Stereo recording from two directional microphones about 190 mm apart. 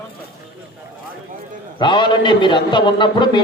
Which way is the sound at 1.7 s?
25° left (ahead or behind).